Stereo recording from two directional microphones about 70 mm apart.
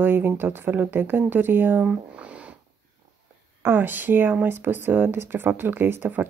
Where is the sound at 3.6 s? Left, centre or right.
Right.